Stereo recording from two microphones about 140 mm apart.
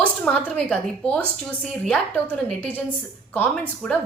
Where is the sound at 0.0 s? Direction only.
5° left (ahead or behind).